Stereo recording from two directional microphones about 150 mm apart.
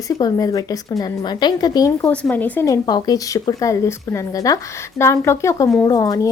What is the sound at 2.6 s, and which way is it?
Speech, 25° left (ahead or behind).